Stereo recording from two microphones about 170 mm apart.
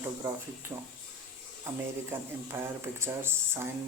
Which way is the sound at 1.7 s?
15° right (ahead or behind).